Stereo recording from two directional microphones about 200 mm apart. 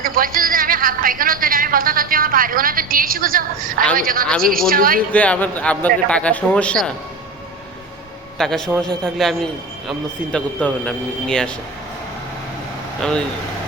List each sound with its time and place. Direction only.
0.0 s a man's voice: 45° right (ahead or behind)
5.1 s a man's voice: 5° left (ahead or behind)
8.4 s a man's voice: centre (ahead or behind)
13.0 s a man's voice: 5° left (ahead or behind)